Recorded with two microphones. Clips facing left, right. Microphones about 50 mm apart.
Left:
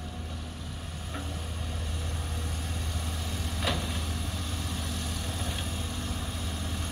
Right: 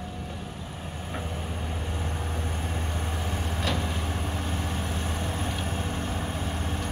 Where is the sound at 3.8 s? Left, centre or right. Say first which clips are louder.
Right 4 dB; right.